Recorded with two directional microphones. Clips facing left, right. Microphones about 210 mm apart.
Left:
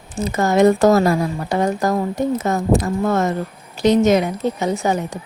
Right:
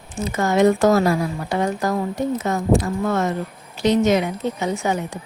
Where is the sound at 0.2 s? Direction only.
40° left (ahead or behind).